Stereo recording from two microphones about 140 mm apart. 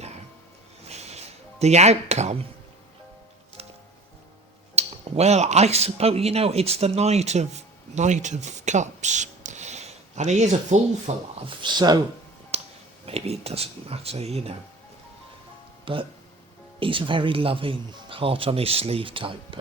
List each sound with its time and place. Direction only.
0.9 s music: 50° right (ahead or behind)
4.7 s speech: 50° right (ahead or behind)
11.4 s speech: 30° right (ahead or behind)
12.5 s a sound: 50° right (ahead or behind)
13.1 s speech: 45° right (ahead or behind)
15.8 s speech: 40° right (ahead or behind)